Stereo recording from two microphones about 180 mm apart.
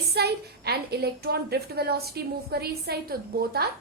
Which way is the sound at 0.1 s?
60° right (ahead or behind).